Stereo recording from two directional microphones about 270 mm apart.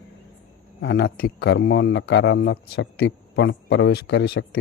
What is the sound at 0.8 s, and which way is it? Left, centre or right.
Speech, left.